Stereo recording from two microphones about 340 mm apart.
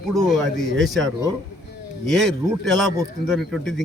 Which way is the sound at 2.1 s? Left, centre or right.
Centre.